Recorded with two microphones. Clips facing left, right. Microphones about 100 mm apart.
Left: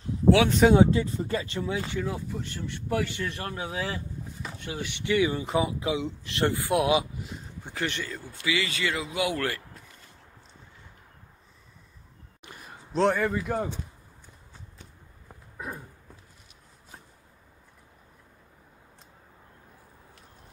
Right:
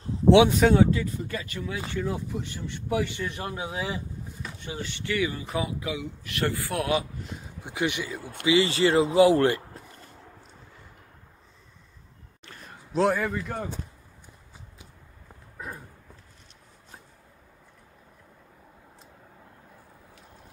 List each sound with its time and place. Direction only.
0.3 s speech: 20° right (ahead or behind)
0.7 s speech: 25° left (ahead or behind)
2.0 s a man's voice: 5° right (ahead or behind)
4.4 s speech: 10° left (ahead or behind)
7.6 s a man's voice: 15° right (ahead or behind)
8.2 s speech: 60° right (ahead or behind)
8.5 s speech: 30° right (ahead or behind)
12.4 s a sound: 10° left (ahead or behind)
12.9 s a man's voice: 5° right (ahead or behind)